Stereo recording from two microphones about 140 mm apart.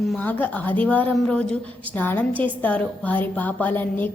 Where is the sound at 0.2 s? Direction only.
10° left (ahead or behind).